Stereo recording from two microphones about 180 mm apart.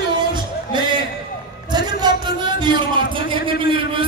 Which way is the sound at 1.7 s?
25° right (ahead or behind).